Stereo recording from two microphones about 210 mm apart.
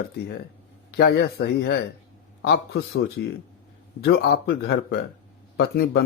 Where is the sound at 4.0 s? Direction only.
55° left (ahead or behind).